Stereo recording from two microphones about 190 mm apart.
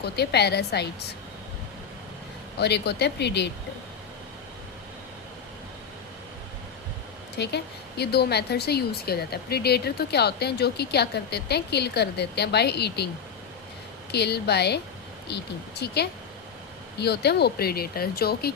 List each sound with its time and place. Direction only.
0.0 s speech: 60° left (ahead or behind)
2.6 s speech: 60° left (ahead or behind)
7.3 s speech: 60° left (ahead or behind)
14.1 s speech: 60° left (ahead or behind)